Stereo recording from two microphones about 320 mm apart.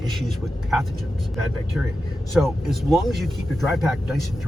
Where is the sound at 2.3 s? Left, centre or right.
Centre.